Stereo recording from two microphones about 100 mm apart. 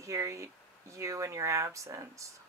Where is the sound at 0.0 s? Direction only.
30° right (ahead or behind).